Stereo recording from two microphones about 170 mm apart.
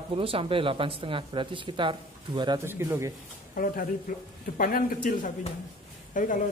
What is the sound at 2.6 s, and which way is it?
Speech, 15° right (ahead or behind).